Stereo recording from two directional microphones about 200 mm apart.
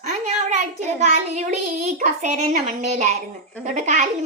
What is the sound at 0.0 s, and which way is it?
A child's voice, 35° right (ahead or behind).